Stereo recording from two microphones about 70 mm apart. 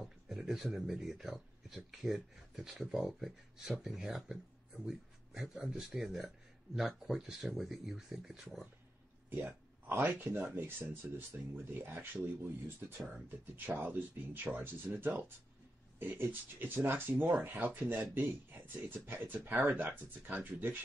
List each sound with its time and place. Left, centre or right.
0.0 s speech: centre
9.3 s speech: right
13.7 s speech: right